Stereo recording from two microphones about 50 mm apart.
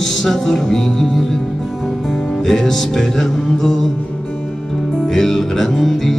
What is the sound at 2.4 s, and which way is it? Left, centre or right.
Music, centre.